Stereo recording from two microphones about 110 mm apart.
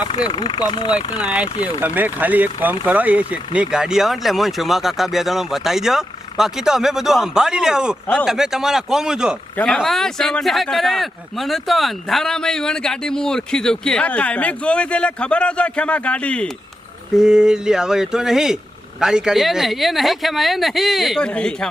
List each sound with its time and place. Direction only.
0.2 s speech: 40° left (ahead or behind)
1.8 s speech: 15° right (ahead or behind); by 16.5 s 10° left (ahead or behind)
17.2 s speech: 5° right (ahead or behind)